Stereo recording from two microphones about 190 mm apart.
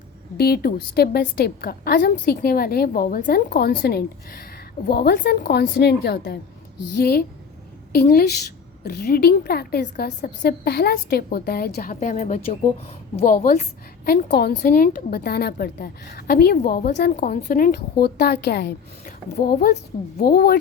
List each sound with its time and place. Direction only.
0.3 s a woman's voice: 55° left (ahead or behind)
14.0 s a woman's voice: 55° left (ahead or behind)